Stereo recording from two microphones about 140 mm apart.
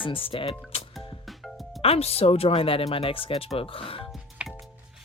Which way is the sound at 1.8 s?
45° left (ahead or behind).